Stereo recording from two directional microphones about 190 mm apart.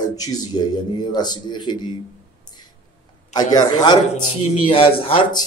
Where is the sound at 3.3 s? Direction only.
20° left (ahead or behind).